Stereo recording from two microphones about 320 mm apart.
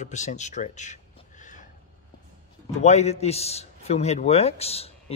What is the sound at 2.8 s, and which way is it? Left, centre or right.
Speech, centre.